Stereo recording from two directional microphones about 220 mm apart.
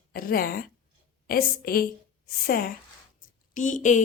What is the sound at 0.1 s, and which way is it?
A woman's voice, 40° left (ahead or behind).